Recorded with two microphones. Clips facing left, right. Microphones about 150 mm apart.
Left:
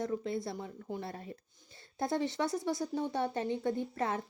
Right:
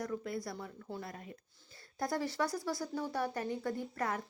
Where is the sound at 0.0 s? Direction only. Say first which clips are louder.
Left 4 dB; 25° left (ahead or behind).